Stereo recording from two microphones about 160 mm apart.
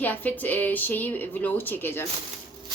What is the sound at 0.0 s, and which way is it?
Speech, 10° left (ahead or behind).